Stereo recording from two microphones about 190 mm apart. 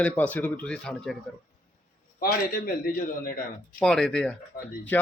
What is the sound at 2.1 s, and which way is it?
A man's voice, 50° left (ahead or behind).